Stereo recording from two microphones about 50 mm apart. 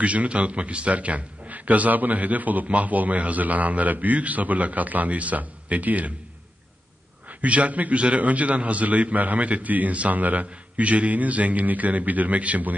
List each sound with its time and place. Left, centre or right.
0.0 s a man's voice: right
7.2 s a man's voice: right